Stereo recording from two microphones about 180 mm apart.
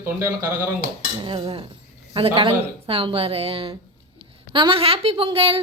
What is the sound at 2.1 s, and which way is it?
A woman's voice, 30° right (ahead or behind).